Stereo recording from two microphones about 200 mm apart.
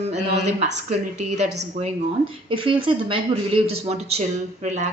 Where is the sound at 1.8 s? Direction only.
35° right (ahead or behind).